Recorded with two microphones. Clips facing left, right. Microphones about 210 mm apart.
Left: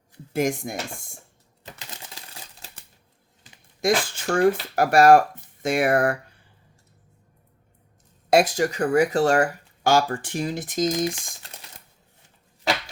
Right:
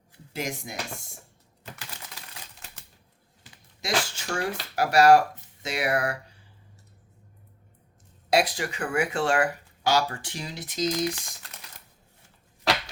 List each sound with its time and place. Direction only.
0.3 s speech: 50° left (ahead or behind)
1.8 s typewriter: 20° left (ahead or behind)
3.8 s speech: 55° left (ahead or behind)
8.3 s speech: 45° left (ahead or behind)
10.9 s speech: 20° left (ahead or behind)